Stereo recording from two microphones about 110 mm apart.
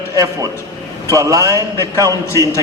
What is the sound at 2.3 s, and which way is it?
Speech, 30° left (ahead or behind).